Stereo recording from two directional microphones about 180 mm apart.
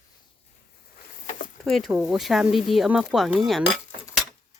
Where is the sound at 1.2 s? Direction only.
50° left (ahead or behind).